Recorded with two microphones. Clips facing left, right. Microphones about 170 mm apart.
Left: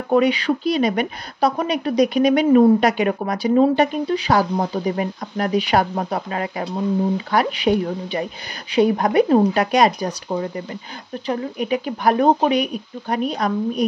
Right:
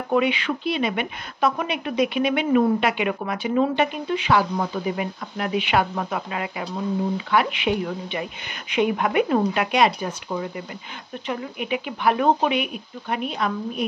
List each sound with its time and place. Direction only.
0.1 s a woman's voice: 40° left (ahead or behind)